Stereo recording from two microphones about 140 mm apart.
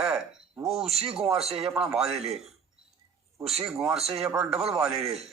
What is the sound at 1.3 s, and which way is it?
Speech, 45° right (ahead or behind).